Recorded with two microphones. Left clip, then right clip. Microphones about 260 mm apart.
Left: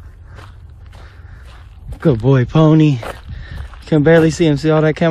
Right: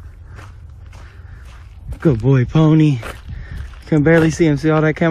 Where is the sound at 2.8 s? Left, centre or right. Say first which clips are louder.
Left 2 dB; centre.